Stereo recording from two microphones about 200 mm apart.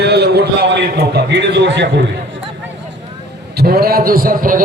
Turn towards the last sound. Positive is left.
turn(degrees=-45)  # may be behind; listen again after turning